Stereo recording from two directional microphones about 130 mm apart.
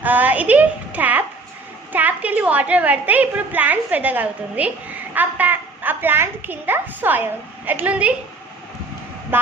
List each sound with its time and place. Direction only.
0.0 s a woman's voice: 15° right (ahead or behind)
9.3 s a woman's voice: 15° right (ahead or behind)